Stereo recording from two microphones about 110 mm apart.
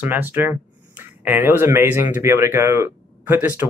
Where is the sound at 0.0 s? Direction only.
15° right (ahead or behind).